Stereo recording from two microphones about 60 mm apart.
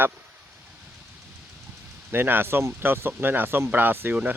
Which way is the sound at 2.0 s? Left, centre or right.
Right.